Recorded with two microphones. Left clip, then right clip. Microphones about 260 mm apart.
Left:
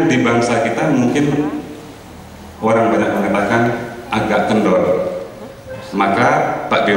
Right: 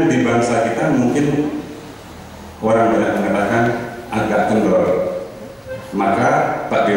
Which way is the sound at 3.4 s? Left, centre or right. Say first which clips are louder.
Left 1 dB; centre.